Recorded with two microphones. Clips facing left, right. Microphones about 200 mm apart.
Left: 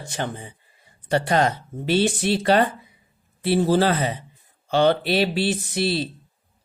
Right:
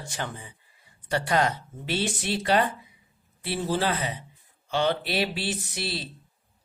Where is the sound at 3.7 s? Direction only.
35° left (ahead or behind).